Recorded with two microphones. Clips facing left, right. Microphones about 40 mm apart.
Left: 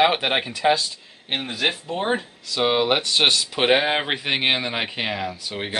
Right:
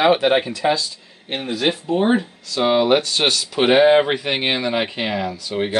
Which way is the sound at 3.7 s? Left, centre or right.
Centre.